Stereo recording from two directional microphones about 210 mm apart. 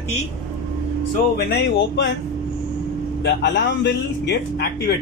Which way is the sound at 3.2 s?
55° left (ahead or behind).